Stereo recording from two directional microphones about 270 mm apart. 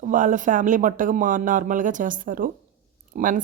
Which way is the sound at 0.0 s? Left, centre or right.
Right.